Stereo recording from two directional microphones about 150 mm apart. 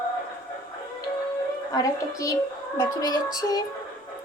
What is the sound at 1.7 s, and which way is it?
Speech, 25° left (ahead or behind).